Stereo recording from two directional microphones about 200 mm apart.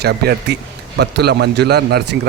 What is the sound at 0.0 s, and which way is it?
A man's voice, 55° right (ahead or behind).